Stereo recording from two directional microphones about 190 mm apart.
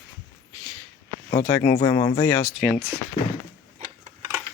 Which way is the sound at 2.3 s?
10° left (ahead or behind).